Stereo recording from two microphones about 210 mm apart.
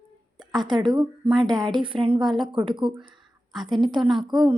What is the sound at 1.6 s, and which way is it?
A woman's voice, 20° right (ahead or behind).